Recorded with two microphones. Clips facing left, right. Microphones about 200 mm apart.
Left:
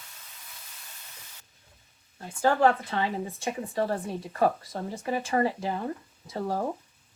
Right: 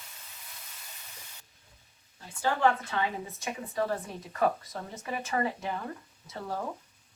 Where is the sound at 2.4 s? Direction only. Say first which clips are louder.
Left 4 dB; 40° left (ahead or behind).